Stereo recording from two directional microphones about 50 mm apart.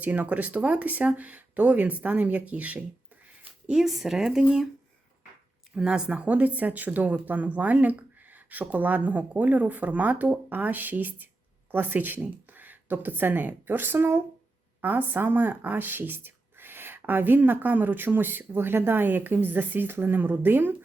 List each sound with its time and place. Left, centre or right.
0.0 s speech: right
3.8 s speech: centre
5.7 s a woman's voice: centre; by 20.7 s right